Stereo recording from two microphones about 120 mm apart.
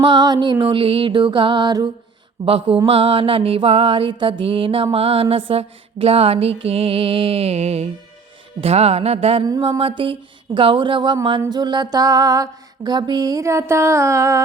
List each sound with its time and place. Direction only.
0.0 s speech: 35° right (ahead or behind)
2.4 s mantra: 50° right (ahead or behind)
8.6 s a sound: 60° right (ahead or behind)
9.4 s speech: 35° right (ahead or behind)
9.7 s speech: 50° right (ahead or behind); by 14.4 s 25° right (ahead or behind)